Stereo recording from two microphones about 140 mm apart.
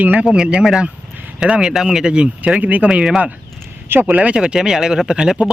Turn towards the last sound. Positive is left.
turn(degrees=-5)  # may be behind; listen again after turning